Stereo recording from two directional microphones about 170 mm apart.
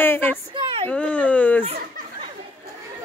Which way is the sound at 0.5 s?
30° right (ahead or behind).